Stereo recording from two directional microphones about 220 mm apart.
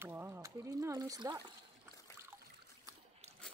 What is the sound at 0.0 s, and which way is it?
Speech, 10° right (ahead or behind).